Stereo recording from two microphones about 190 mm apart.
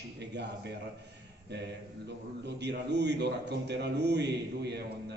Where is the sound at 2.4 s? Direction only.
65° right (ahead or behind).